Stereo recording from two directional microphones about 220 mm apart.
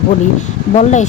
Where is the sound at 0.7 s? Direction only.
35° left (ahead or behind).